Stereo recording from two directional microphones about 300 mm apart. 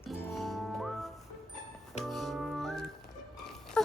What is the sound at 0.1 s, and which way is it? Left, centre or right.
Music, centre.